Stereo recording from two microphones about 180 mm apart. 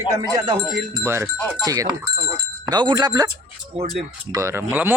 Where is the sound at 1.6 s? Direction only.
20° right (ahead or behind).